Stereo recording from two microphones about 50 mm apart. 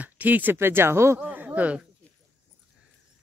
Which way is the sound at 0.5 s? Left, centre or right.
Right.